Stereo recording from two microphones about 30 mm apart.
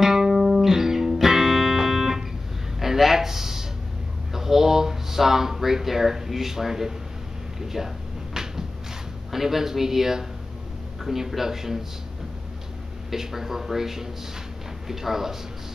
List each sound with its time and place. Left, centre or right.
0.0 s music: centre
2.8 s a sound: centre
4.3 s speech: centre
7.6 s a sound: centre
9.3 s speech: centre
13.1 s speech: centre